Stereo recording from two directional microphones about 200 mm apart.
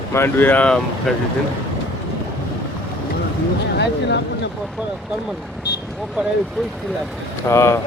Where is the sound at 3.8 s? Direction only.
60° left (ahead or behind).